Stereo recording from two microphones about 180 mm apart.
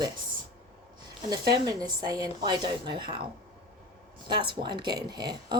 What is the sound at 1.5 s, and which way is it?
Speech, 20° right (ahead or behind).